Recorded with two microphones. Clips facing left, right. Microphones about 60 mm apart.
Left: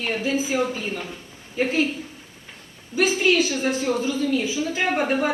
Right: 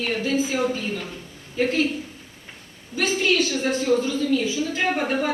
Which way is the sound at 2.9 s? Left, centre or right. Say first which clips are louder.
Left 2 dB; centre.